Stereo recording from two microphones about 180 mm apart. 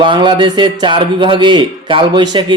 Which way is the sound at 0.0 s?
25° right (ahead or behind).